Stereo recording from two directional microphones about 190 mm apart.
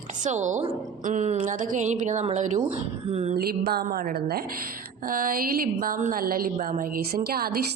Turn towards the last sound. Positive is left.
turn(degrees=-55)  # may be behind; listen again after turning